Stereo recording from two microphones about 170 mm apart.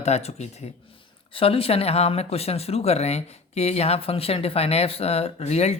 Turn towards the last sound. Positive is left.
turn(degrees=40)  # may be behind; listen again after turning